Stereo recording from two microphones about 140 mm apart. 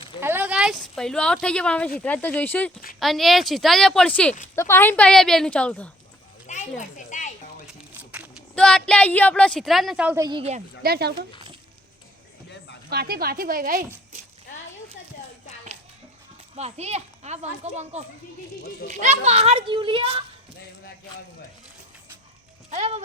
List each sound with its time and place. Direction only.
0.2 s speech: 15° right (ahead or behind); by 2.7 s 10° left (ahead or behind)
3.0 s a woman's voice: centre (ahead or behind)
6.5 s children playing: 60° left (ahead or behind)
7.9 s a sound: 10° right (ahead or behind)
8.5 s a woman's voice: 5° left (ahead or behind)
10.2 s speech: 30° right (ahead or behind)
10.8 s a woman's voice: 90° right
13.1 s a woman's voice: 90° right
16.6 s speech: 50° right (ahead or behind)
22.7 s speech: 45° right (ahead or behind)